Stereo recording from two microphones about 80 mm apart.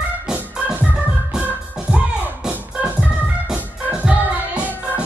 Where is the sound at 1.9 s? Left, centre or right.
Centre.